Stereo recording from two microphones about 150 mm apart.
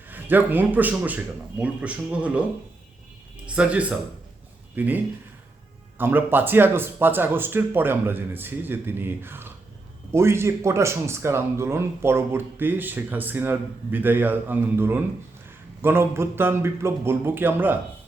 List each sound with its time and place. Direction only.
0.1 s speech: 10° right (ahead or behind)
3.4 s speech: 10° right (ahead or behind)